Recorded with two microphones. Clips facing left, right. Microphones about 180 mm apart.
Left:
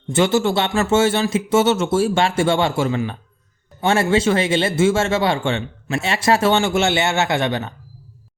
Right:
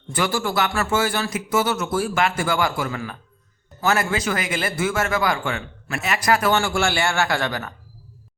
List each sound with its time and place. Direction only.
0.1 s speech: 25° left (ahead or behind)